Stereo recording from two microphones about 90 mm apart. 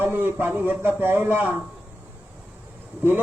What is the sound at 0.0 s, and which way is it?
A man's voice, 25° right (ahead or behind).